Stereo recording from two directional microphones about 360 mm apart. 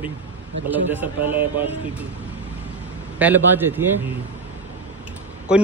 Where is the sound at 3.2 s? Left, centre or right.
Centre.